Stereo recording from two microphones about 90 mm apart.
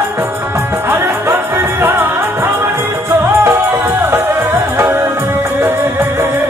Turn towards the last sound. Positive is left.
turn(degrees=-30)  # may be behind; listen again after turning